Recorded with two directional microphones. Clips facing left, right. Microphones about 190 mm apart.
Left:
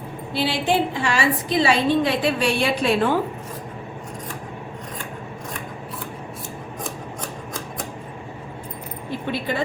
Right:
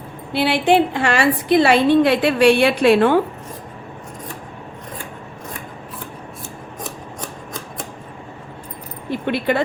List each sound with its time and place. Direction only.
0.3 s a woman's voice: 65° right (ahead or behind)
9.2 s speech: 70° right (ahead or behind)